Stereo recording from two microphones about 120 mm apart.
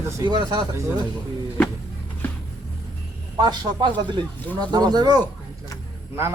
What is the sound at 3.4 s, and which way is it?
Speech, 40° right (ahead or behind).